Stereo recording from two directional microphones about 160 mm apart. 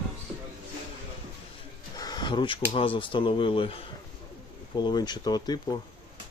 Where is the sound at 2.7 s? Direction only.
35° left (ahead or behind).